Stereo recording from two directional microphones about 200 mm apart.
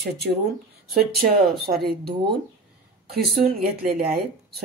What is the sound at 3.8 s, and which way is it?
Speech, 50° right (ahead or behind).